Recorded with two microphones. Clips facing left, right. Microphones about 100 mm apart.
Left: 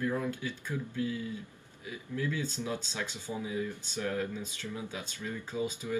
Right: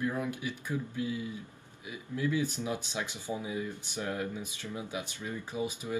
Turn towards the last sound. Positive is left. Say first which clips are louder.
# left 1 dB
turn(degrees=-15)  # may be behind; listen again after turning